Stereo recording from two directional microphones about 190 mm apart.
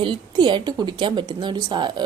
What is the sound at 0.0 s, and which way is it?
A woman's voice, 25° right (ahead or behind).